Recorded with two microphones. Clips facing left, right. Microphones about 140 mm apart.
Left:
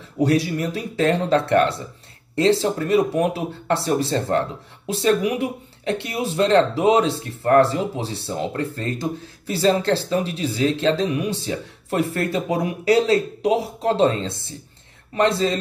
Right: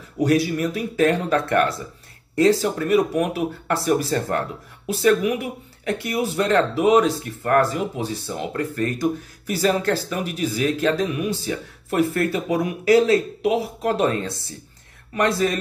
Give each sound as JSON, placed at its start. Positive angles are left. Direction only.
{"t": 0.2, "sound": "speech", "side_deg": 35}